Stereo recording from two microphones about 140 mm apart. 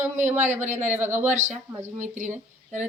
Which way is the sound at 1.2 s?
55° right (ahead or behind).